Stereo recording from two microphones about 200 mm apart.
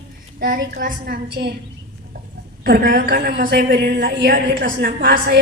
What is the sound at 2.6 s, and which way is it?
A woman's voice, 45° right (ahead or behind).